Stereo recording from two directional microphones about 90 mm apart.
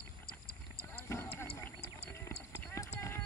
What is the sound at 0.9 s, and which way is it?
Horse, 25° left (ahead or behind).